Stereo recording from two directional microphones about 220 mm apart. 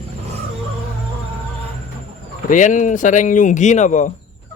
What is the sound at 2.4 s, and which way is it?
Speech, 35° left (ahead or behind).